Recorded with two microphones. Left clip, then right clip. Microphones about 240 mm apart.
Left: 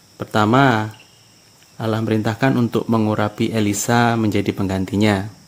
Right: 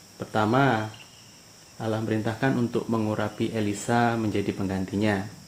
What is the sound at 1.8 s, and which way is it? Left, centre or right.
Speech, left.